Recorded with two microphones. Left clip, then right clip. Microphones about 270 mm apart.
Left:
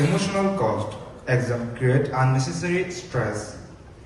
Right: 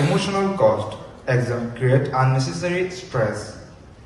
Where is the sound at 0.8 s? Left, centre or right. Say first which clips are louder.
Right 2 dB; centre.